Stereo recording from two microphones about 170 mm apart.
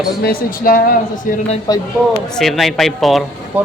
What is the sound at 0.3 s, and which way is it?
Speech, 60° left (ahead or behind).